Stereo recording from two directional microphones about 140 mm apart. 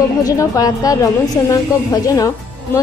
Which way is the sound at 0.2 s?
25° left (ahead or behind).